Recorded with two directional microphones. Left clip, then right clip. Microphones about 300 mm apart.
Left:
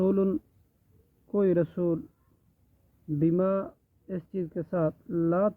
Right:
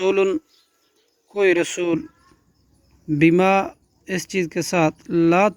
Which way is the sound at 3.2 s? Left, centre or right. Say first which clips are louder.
Right 11 dB; right.